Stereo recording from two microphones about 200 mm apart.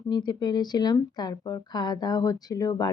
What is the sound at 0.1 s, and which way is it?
A woman's voice, 20° left (ahead or behind).